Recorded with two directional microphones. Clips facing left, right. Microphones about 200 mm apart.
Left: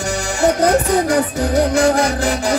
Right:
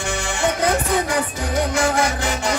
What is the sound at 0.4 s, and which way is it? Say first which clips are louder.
Music: left 7 dB; 40° left (ahead or behind).